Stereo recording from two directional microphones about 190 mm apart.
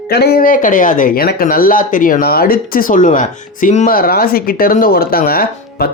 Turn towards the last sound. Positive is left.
turn(degrees=50)  # may be behind; listen again after turning